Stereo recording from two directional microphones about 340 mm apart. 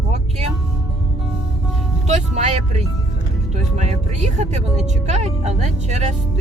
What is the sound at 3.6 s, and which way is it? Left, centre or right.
Music, centre.